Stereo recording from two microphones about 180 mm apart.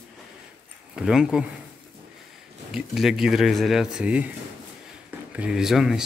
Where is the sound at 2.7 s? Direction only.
Centre (ahead or behind).